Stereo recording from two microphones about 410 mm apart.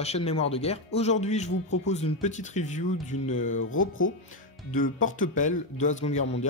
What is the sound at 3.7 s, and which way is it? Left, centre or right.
Speech, left.